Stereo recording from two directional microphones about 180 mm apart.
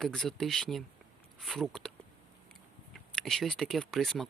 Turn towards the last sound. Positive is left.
turn(degrees=0)  # may be behind; listen again after turning